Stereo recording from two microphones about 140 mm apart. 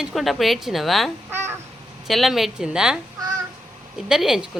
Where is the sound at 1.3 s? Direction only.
15° right (ahead or behind).